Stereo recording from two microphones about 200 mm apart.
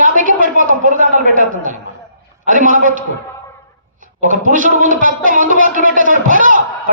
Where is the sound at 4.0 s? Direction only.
40° right (ahead or behind).